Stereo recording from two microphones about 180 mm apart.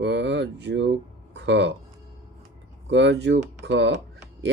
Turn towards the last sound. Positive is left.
turn(degrees=-80)